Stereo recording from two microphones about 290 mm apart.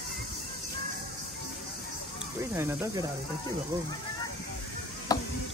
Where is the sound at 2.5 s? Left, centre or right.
Centre.